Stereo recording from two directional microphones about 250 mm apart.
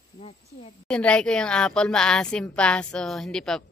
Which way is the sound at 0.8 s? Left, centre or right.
Centre.